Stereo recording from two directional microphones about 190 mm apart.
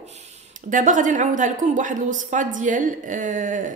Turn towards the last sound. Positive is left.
turn(degrees=-40)  # may be behind; listen again after turning